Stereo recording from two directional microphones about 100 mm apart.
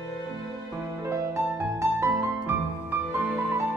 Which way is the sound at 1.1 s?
25° right (ahead or behind).